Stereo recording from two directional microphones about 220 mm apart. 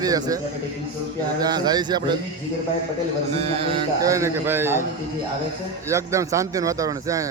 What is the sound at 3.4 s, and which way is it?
Speech, 30° right (ahead or behind).